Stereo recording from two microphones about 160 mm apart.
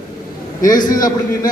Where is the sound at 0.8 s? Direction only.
25° left (ahead or behind).